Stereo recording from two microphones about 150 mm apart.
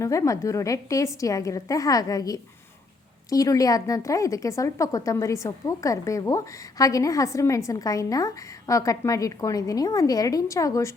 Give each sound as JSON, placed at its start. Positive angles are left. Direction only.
{"t": 0.0, "sound": "a woman's voice", "side_deg": 20}